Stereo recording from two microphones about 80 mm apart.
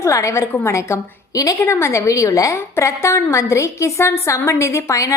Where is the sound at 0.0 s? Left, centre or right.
Left.